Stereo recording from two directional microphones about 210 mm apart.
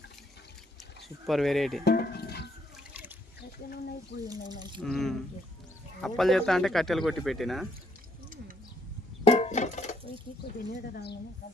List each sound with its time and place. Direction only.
1.3 s speech: centre (ahead or behind)
1.8 s music: 50° left (ahead or behind)
2.9 s trickle: 10° right (ahead or behind)
4.2 s speech: 20° right (ahead or behind)
4.8 s speech: centre (ahead or behind)
9.2 s music: 30° left (ahead or behind)
10.9 s speech: 50° left (ahead or behind)